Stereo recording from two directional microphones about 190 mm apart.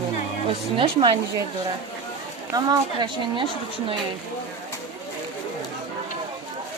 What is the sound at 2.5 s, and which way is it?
Speech, 20° right (ahead or behind).